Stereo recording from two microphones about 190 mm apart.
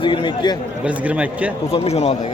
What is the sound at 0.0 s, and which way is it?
Speech, 25° left (ahead or behind).